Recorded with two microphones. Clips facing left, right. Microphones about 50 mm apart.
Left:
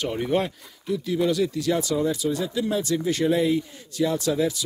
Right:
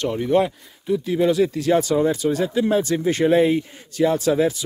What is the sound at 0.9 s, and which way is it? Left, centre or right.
Speech, right.